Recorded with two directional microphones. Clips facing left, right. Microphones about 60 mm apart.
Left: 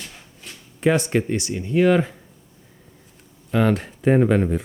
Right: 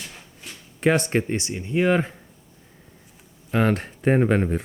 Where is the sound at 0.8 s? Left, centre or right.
Right.